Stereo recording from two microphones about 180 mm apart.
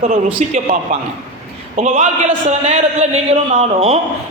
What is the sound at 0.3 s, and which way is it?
A man's voice, 45° right (ahead or behind).